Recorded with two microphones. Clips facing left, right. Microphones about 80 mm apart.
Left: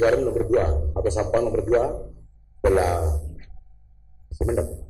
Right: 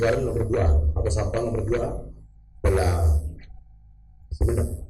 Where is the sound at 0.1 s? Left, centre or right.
Left.